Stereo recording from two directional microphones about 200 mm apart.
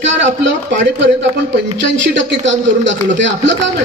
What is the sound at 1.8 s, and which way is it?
A man's voice, 65° right (ahead or behind).